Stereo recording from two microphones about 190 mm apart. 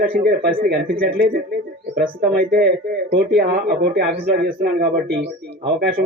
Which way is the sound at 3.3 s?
45° right (ahead or behind).